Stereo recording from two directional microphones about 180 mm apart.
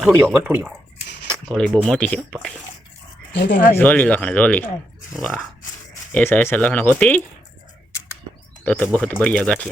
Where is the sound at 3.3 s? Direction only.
75° left (ahead or behind).